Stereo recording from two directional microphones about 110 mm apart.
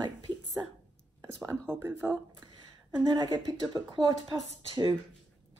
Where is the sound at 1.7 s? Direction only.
20° right (ahead or behind).